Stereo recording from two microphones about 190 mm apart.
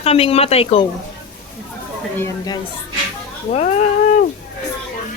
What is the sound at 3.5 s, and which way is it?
Speech, 35° left (ahead or behind).